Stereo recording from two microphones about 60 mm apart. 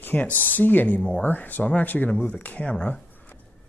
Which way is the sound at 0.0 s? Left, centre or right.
Left.